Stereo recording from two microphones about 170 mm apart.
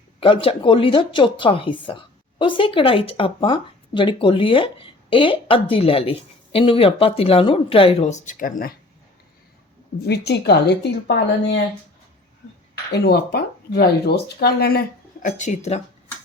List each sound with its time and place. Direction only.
0.2 s speech: 30° left (ahead or behind); by 8.7 s 55° left (ahead or behind)
10.0 s speech: 75° left (ahead or behind)
12.9 s speech: 70° left (ahead or behind)
15.3 s speech: 45° left (ahead or behind)